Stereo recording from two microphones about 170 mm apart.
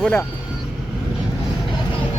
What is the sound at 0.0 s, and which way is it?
Speech, 10° left (ahead or behind).